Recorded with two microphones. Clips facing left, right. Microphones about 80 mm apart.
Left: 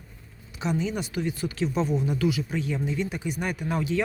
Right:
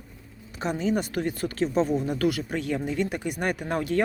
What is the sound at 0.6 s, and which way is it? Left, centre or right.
Speech, right.